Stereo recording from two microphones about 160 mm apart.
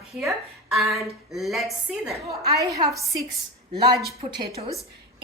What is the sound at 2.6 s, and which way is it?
A woman's voice, 25° right (ahead or behind).